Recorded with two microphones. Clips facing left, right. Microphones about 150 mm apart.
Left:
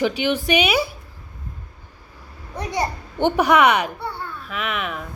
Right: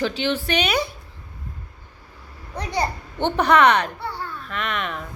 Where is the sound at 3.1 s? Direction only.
10° left (ahead or behind).